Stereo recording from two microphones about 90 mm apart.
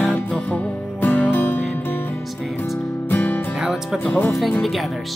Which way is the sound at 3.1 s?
20° left (ahead or behind).